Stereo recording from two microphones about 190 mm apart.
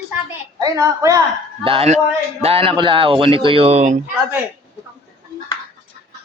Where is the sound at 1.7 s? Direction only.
30° right (ahead or behind).